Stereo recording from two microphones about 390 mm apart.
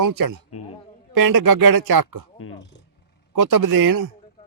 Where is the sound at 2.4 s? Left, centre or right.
Left.